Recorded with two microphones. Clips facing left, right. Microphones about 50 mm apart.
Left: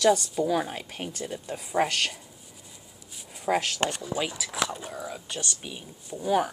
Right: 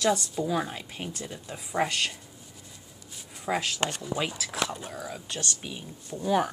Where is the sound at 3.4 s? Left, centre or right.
Centre.